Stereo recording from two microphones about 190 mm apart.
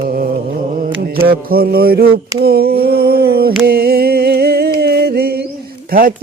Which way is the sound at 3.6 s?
55° right (ahead or behind).